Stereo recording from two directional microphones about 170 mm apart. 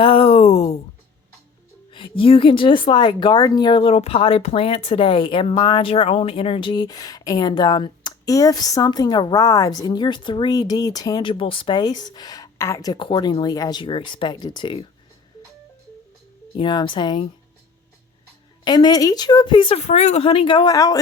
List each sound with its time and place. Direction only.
0.0 s a sound: 30° left (ahead or behind)
1.9 s speech: 30° left (ahead or behind)
16.6 s speech: 25° left (ahead or behind)
18.6 s speech: 25° left (ahead or behind)